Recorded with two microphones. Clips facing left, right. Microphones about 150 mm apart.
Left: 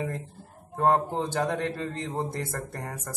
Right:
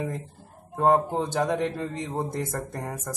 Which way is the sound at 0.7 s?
15° right (ahead or behind).